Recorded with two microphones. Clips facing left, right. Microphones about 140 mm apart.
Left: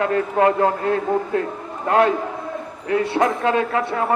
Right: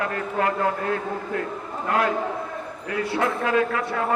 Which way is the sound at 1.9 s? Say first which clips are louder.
Left 6 dB; 25° left (ahead or behind).